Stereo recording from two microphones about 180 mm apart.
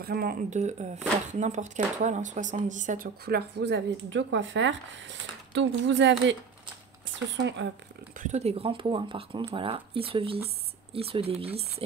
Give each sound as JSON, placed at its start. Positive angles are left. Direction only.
{"t": 0.0, "sound": "speech", "side_deg": -55}
{"t": 3.3, "sound": "speech", "side_deg": -65}
{"t": 7.3, "sound": "speech", "side_deg": -75}
{"t": 8.2, "sound": "speech", "side_deg": -40}